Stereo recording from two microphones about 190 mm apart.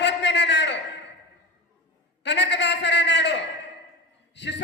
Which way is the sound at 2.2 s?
65° left (ahead or behind).